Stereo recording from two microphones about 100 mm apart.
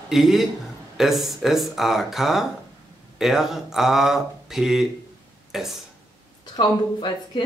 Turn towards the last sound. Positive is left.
turn(degrees=50)  # may be behind; listen again after turning